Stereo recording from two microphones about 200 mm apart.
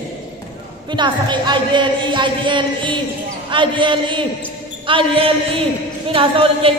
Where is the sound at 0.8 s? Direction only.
25° right (ahead or behind).